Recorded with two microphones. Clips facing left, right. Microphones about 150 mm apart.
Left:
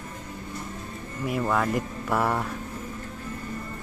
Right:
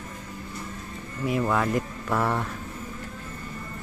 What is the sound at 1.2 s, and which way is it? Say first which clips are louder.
Speech: right 1 dB; centre (ahead or behind).